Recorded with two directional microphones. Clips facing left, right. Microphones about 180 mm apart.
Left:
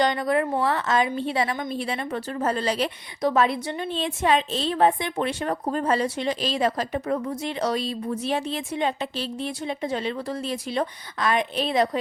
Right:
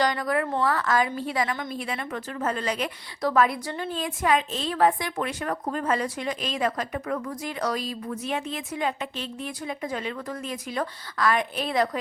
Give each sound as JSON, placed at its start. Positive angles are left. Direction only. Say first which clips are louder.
{"t": 0.0, "sound": "a woman's voice", "louder": "left 3 dB", "side_deg": 25}